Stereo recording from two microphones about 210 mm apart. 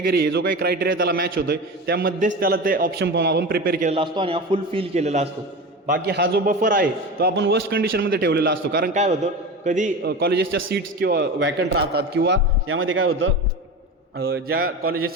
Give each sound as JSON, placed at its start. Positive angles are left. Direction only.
{"t": 0.0, "sound": "a man's voice", "side_deg": -45}
{"t": 3.9, "sound": "a man's voice", "side_deg": -25}
{"t": 5.9, "sound": "a man's voice", "side_deg": -50}
{"t": 10.0, "sound": "a man's voice", "side_deg": -50}
{"t": 14.2, "sound": "a man's voice", "side_deg": -50}